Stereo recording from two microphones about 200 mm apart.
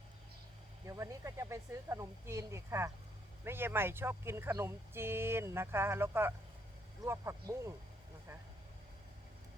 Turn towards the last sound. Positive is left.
turn(degrees=-15)  # may be behind; listen again after turning